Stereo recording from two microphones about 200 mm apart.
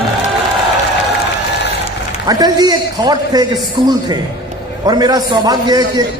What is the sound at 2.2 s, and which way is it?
A man's voice, 20° right (ahead or behind).